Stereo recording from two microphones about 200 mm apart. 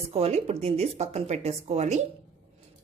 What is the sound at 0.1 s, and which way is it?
Speech, 30° right (ahead or behind).